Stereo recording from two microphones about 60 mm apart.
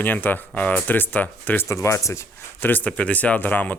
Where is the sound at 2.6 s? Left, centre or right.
Left.